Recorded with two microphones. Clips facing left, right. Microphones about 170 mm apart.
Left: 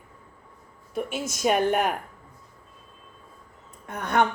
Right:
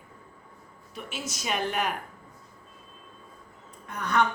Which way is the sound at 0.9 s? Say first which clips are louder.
Left 8 dB; 50° left (ahead or behind).